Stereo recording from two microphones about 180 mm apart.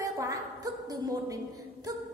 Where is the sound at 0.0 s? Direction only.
20° right (ahead or behind).